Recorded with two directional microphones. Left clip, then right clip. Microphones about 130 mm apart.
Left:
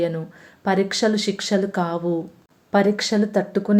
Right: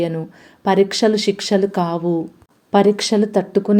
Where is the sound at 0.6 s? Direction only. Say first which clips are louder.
Right 5 dB; 25° right (ahead or behind).